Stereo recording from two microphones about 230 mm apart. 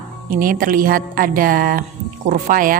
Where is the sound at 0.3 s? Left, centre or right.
Right.